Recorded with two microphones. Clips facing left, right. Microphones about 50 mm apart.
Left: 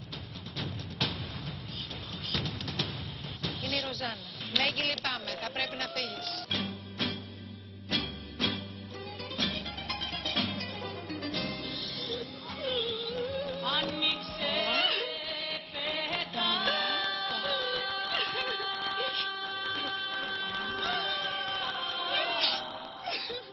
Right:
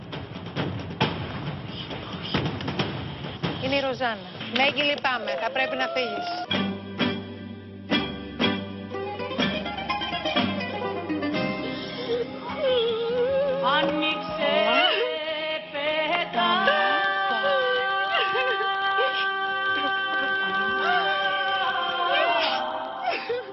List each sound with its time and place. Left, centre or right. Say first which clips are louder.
0.6 s music: right 9 dB; right
2.3 s music: right 8 dB; right
3.4 s a sound: right 10 dB; right
4.6 s a woman's voice: right 8 dB; right
7.9 s music: right 9 dB; right
12.7 s music: right 10 dB; right
13.3 s music: right 12 dB; right
17.9 s a sound: right 10 dB; right
20.5 s music: right 10 dB; right
21.6 s a capella: right 10 dB; right
22.1 s music: right 8 dB; right